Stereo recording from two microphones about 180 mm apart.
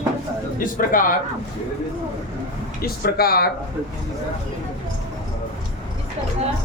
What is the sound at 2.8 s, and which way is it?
Speech, 55° left (ahead or behind).